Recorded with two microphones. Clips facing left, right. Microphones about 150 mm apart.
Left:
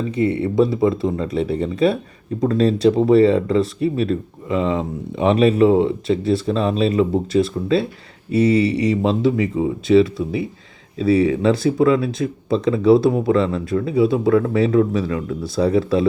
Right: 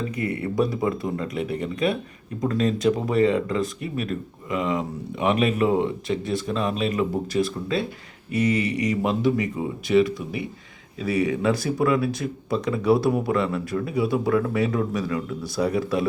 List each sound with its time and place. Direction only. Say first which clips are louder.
0.1 s speech: left 8 dB; 25° left (ahead or behind)